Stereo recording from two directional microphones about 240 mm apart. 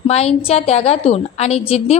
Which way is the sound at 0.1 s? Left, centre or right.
Left.